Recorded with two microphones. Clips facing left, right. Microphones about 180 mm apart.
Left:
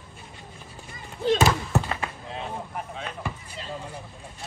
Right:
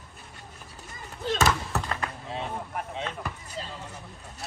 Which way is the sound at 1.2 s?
15° left (ahead or behind).